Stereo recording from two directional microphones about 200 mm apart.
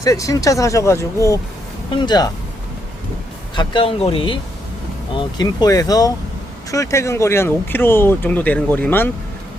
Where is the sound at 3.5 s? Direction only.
25° left (ahead or behind).